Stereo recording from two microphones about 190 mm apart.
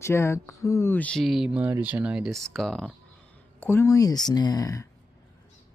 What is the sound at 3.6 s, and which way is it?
Speech, 15° left (ahead or behind).